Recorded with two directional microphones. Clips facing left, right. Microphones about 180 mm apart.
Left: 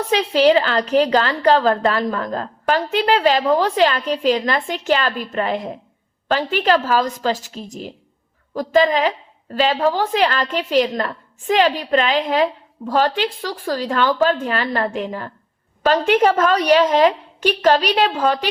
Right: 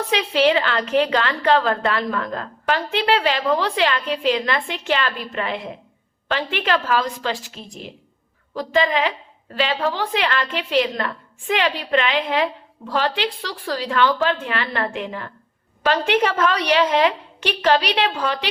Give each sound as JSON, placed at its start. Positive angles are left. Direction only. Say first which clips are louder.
{"t": 0.1, "sound": "a woman's voice", "louder": "left 4 dB", "side_deg": 40}